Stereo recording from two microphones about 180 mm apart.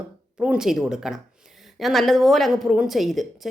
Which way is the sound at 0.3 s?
5° right (ahead or behind).